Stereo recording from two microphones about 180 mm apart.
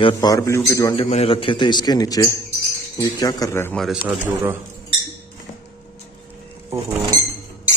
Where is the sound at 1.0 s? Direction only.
35° left (ahead or behind); by 3.8 s 15° left (ahead or behind).